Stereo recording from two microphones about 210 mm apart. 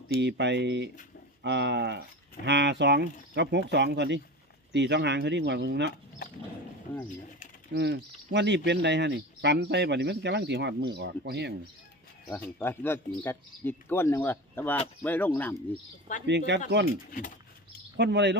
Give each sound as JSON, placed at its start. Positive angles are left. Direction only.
{"t": 0.2, "sound": "speech", "side_deg": -55}
{"t": 7.7, "sound": "speech", "side_deg": -50}
{"t": 12.3, "sound": "speech", "side_deg": 10}
{"t": 16.2, "sound": "speech", "side_deg": -55}
{"t": 17.1, "sound": "bird", "side_deg": 40}
{"t": 17.9, "sound": "speech", "side_deg": -55}